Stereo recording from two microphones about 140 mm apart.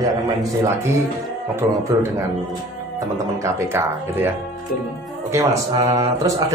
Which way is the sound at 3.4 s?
15° right (ahead or behind).